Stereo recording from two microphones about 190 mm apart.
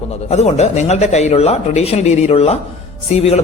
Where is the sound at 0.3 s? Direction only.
35° left (ahead or behind).